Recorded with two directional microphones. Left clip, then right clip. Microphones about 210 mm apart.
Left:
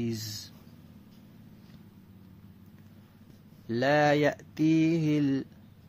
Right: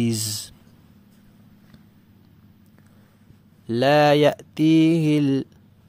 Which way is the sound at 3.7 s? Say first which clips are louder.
Right 8 dB; 40° right (ahead or behind).